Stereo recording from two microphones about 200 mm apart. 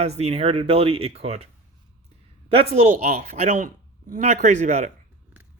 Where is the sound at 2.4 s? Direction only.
30° right (ahead or behind).